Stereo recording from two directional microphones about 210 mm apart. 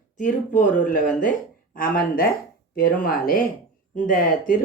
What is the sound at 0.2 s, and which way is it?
Speech, 40° left (ahead or behind).